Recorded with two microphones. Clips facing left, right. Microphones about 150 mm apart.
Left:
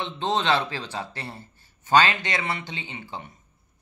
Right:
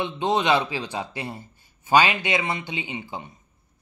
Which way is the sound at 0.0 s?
15° right (ahead or behind).